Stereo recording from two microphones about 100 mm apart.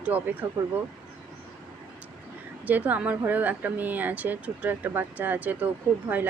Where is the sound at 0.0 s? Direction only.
15° right (ahead or behind).